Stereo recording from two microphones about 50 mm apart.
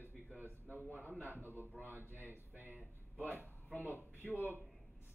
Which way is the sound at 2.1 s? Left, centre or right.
Right.